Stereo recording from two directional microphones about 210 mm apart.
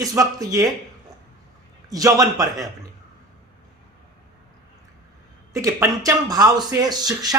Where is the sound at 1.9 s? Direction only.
15° right (ahead or behind).